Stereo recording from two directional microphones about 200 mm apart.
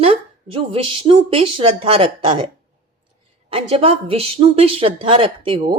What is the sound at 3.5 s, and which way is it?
Speech, 30° right (ahead or behind).